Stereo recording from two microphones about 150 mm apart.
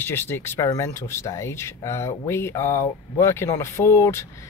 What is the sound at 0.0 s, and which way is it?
Speech, 15° left (ahead or behind).